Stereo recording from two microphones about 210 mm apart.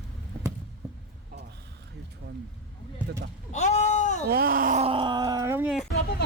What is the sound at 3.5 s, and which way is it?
Sheep, 35° left (ahead or behind).